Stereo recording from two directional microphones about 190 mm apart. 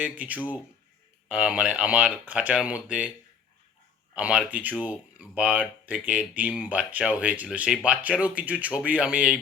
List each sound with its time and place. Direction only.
0.0 s speech: 10° right (ahead or behind)
4.1 s speech: 5° right (ahead or behind)